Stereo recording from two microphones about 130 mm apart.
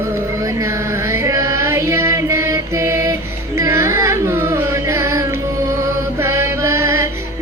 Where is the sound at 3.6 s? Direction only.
20° right (ahead or behind).